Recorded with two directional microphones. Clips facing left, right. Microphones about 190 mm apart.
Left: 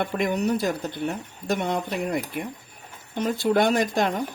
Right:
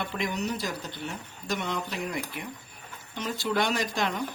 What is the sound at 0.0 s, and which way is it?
Speech, 55° left (ahead or behind).